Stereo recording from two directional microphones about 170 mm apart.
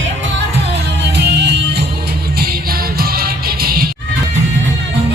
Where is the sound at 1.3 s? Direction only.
80° right.